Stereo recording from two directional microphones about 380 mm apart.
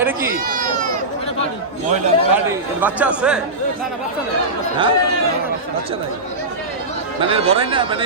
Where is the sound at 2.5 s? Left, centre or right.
Centre.